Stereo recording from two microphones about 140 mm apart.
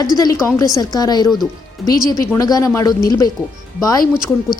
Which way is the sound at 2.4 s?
25° left (ahead or behind).